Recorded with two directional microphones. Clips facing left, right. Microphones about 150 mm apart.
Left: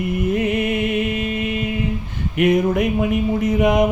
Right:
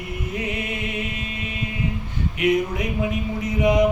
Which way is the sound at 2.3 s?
55° left (ahead or behind).